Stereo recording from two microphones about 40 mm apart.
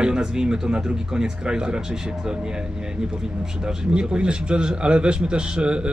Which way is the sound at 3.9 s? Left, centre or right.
Right.